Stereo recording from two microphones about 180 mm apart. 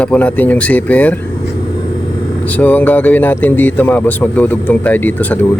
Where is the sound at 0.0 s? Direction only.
5° left (ahead or behind).